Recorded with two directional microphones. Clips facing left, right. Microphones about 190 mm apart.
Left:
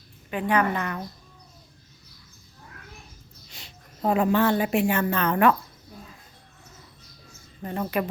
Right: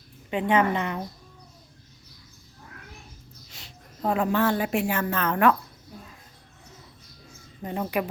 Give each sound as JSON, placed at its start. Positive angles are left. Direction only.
{"t": 0.3, "sound": "a woman's voice", "side_deg": -20}
{"t": 3.5, "sound": "a woman's voice", "side_deg": 0}
{"t": 7.6, "sound": "speech", "side_deg": -15}